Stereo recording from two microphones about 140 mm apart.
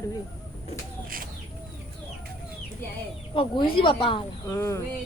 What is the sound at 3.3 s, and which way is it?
Speech, 40° left (ahead or behind).